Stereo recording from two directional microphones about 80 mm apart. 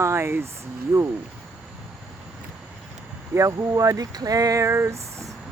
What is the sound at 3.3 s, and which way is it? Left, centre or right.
Speech, right.